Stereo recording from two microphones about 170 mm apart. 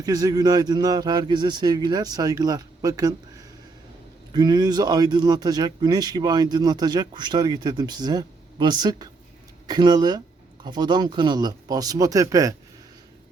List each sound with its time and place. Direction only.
0.0 s speech: 20° right (ahead or behind)